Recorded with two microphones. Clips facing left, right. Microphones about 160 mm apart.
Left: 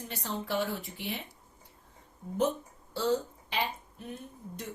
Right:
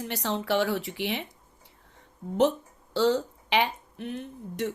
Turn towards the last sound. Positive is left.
turn(degrees=-80)